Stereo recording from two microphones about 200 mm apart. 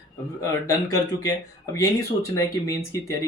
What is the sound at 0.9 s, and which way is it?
Speech, 20° left (ahead or behind).